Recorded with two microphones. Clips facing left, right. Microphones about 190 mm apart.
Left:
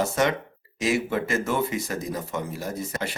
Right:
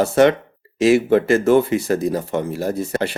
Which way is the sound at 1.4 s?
30° right (ahead or behind).